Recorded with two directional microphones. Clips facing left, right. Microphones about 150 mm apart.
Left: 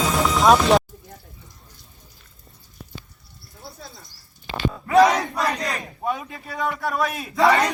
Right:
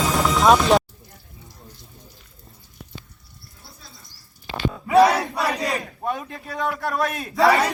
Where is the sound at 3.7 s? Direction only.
60° left (ahead or behind).